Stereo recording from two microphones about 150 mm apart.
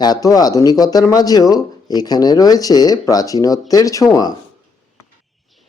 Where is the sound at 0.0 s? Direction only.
25° left (ahead or behind).